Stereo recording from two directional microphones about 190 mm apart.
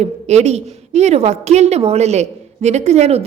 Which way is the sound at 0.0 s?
35° right (ahead or behind).